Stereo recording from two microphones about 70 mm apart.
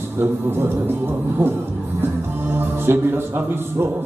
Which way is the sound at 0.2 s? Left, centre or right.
Right.